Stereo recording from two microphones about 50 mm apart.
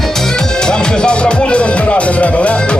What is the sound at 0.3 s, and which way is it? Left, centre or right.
Music, centre.